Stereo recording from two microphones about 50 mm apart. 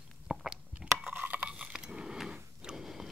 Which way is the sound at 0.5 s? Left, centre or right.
Centre.